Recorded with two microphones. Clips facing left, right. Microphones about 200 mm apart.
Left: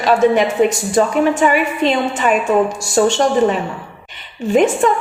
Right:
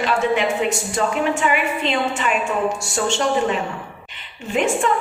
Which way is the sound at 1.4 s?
45° left (ahead or behind).